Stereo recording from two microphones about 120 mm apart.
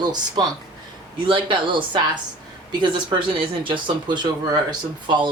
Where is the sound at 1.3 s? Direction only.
40° right (ahead or behind).